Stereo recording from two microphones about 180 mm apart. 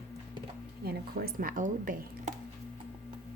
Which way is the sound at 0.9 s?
55° right (ahead or behind).